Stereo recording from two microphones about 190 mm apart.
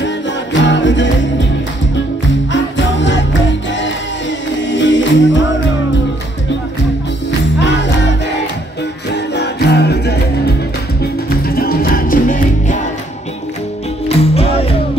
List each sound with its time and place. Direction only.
0.5 s music: 70° left (ahead or behind)
2.5 s music: 75° left (ahead or behind)
4.6 s music: 75° left (ahead or behind)
7.5 s music: 65° left (ahead or behind)
9.1 s music: 65° left (ahead or behind); by 12.7 s 45° left (ahead or behind)
14.0 s music: 30° left (ahead or behind)